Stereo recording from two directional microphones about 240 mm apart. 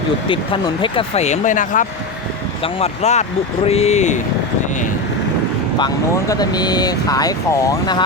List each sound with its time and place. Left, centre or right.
0.3 s speech: left
5.8 s speech: centre